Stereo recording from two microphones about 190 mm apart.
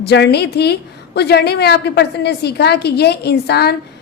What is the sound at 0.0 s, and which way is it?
A woman's voice, 60° left (ahead or behind).